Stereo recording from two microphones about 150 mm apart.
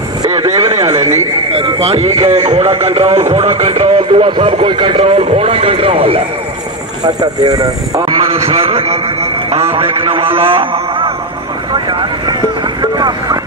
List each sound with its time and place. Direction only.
0.6 s speech: 20° right (ahead or behind)
1.6 s a man's voice: 45° right (ahead or behind)
7.2 s speech: 25° right (ahead or behind)
8.3 s a man's voice: 40° right (ahead or behind)
12.9 s vehicle: 25° right (ahead or behind)